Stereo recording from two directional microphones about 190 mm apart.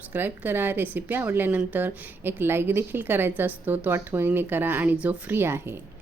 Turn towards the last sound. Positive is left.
turn(degrees=-10)  # may be behind; listen again after turning